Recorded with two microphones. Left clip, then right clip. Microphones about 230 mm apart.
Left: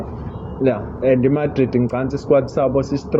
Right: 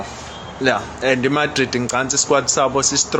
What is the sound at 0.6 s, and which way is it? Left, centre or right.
A man's voice, centre.